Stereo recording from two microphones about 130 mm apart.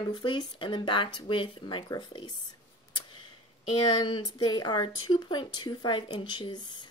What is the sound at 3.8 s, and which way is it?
Speech, 35° left (ahead or behind).